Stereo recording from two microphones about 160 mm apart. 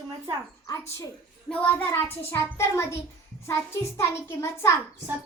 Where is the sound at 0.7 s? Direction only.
20° left (ahead or behind).